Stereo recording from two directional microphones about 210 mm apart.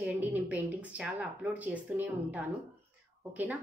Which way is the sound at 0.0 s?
10° right (ahead or behind).